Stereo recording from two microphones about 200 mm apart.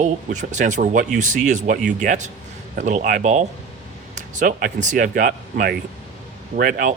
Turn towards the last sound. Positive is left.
turn(degrees=-45)  # may be behind; listen again after turning